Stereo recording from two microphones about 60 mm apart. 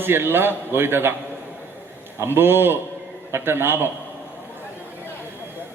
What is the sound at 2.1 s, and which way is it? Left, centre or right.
A man's voice, right.